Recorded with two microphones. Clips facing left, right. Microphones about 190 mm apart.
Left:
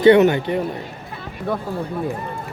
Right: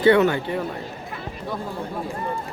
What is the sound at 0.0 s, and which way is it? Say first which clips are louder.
Speech: left 5 dB; 20° left (ahead or behind).